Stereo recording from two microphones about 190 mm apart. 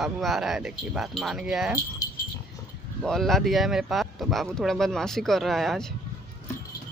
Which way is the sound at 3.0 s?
Centre (ahead or behind).